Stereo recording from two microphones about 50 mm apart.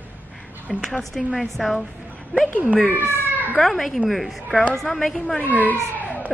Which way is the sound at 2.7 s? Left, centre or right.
Left.